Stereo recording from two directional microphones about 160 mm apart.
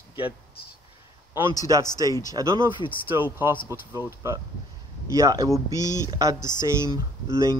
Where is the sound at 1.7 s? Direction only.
20° right (ahead or behind).